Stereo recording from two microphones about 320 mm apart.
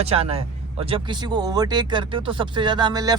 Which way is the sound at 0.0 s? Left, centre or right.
Centre.